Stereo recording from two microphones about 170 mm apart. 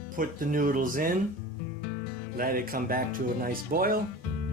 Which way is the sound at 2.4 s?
60° right (ahead or behind).